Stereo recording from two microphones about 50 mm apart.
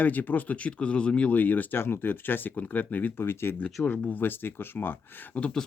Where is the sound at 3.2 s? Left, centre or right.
Left.